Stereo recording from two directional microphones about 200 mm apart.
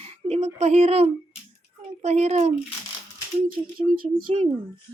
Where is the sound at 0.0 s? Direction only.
30° right (ahead or behind).